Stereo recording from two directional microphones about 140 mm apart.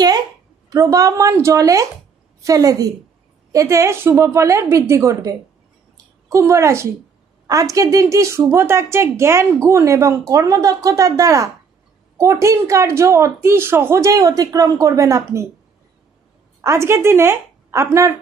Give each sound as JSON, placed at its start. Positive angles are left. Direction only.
{"t": 0.7, "sound": "a woman's voice", "side_deg": -25}
{"t": 16.6, "sound": "a woman's voice", "side_deg": -20}